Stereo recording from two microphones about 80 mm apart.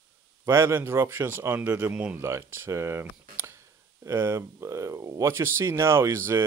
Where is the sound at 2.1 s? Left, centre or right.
Right.